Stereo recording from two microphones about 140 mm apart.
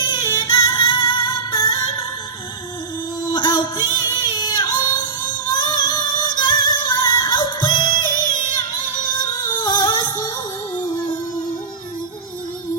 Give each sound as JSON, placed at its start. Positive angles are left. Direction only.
{"t": 0.5, "sound": "music", "side_deg": 30}
{"t": 1.5, "sound": "music", "side_deg": 25}
{"t": 3.3, "sound": "music", "side_deg": 30}
{"t": 9.6, "sound": "singing", "side_deg": 30}
{"t": 10.0, "sound": "music", "side_deg": 25}